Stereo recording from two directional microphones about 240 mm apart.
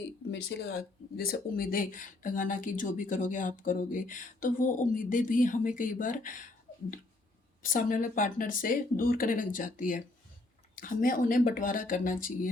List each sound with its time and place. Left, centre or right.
0.3 s speech: left
7.6 s speech: left